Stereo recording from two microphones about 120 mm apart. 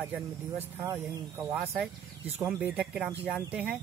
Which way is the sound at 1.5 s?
15° right (ahead or behind).